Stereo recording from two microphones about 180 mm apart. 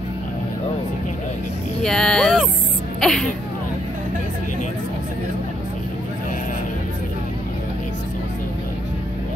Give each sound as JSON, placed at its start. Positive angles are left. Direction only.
{"t": 1.8, "sound": "speech", "side_deg": 5}
{"t": 3.0, "sound": "music", "side_deg": 5}